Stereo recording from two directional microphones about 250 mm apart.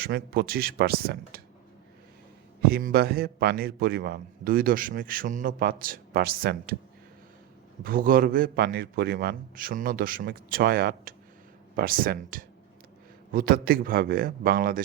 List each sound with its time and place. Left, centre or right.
0.0 s a man's voice: right
2.6 s a man's voice: right
7.9 s a man's voice: right